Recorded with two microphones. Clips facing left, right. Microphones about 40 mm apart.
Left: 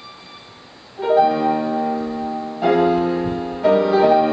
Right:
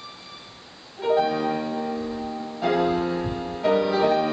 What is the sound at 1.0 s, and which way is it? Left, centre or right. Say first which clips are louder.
Music: left 6 dB; centre.